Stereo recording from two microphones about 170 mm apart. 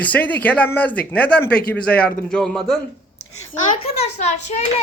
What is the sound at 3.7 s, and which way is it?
Speech, 40° left (ahead or behind).